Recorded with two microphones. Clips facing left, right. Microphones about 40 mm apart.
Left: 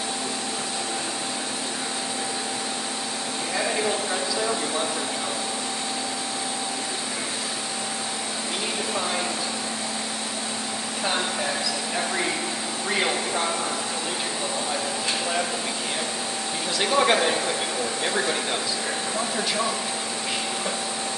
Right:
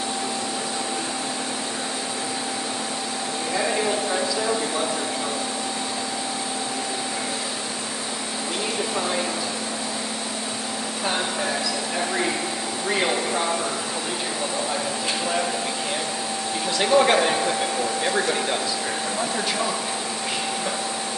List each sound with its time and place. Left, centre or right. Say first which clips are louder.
3.5 s a sound: right 2 dB; centre
12.9 s speech: right 2 dB; centre
16.8 s speech: right 3 dB; centre